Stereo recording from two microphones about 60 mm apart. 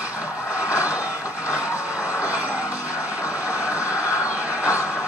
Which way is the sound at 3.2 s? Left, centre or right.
Left.